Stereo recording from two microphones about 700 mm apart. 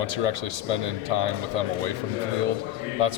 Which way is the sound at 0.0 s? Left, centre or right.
Right.